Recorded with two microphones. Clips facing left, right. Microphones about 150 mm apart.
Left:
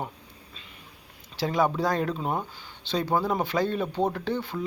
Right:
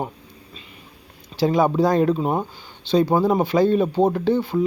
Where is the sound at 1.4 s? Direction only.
15° right (ahead or behind).